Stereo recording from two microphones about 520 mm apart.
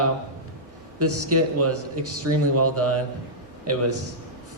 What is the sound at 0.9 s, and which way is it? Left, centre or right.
Speech, right.